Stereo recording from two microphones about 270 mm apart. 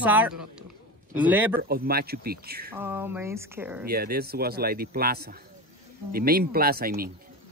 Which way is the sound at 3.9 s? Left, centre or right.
Right.